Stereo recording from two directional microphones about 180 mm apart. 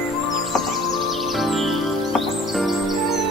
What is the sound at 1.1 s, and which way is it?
Music, centre (ahead or behind).